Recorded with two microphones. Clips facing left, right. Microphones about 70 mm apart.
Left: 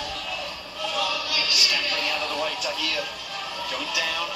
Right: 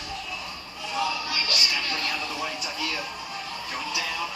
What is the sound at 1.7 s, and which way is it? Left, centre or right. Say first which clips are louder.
Speech: left 2 dB; centre.